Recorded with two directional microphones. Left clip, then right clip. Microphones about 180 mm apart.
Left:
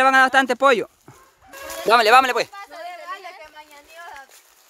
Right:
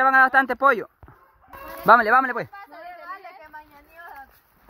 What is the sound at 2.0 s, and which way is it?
Speech, 45° left (ahead or behind).